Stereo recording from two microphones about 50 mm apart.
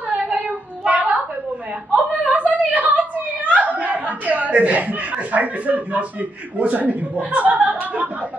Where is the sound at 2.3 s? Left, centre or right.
Right.